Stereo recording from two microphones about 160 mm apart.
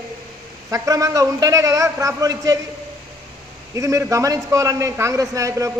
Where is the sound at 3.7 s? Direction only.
20° right (ahead or behind).